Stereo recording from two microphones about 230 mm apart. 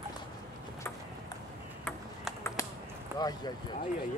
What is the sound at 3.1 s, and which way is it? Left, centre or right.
Speech, centre.